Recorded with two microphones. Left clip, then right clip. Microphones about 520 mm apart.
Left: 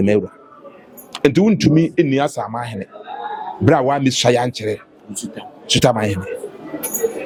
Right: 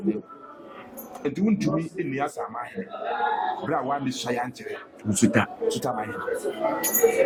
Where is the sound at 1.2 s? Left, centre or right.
Left.